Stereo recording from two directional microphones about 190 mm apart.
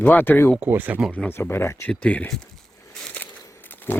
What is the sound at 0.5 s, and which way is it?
Speech, 10° right (ahead or behind).